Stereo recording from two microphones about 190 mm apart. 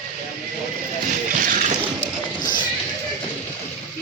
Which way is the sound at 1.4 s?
40° right (ahead or behind).